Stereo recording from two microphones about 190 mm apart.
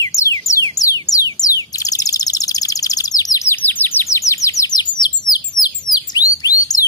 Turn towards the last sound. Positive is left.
turn(degrees=20)  # may be behind; listen again after turning